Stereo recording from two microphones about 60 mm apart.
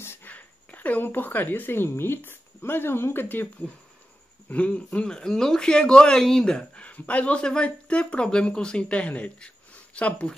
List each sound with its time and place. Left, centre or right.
0.0 s a sound: left
0.3 s speech: left
4.5 s a man's voice: left